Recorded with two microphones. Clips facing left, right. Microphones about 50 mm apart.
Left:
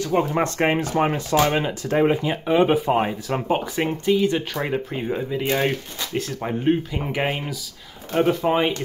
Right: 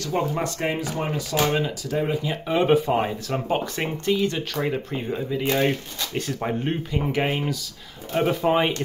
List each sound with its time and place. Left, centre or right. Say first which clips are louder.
0.0 s speech: left 4 dB; left
0.4 s speech: left 5 dB; left
2.2 s speech: left 2 dB; centre
6.1 s speech: left 1 dB; centre